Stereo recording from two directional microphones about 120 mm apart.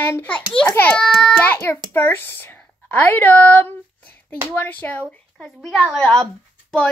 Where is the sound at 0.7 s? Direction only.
10° left (ahead or behind).